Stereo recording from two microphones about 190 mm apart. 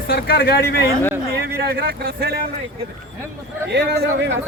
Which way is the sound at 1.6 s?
55° right (ahead or behind).